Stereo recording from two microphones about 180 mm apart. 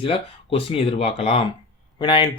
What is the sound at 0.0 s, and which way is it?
Speech, 30° left (ahead or behind).